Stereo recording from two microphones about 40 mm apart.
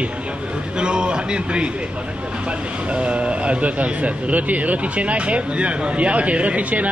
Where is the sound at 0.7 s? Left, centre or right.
Right.